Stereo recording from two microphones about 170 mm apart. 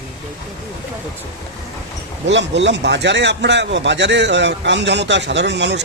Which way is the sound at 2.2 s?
90° right.